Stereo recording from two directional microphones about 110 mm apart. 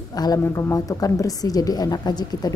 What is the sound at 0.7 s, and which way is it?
Speech, 30° left (ahead or behind).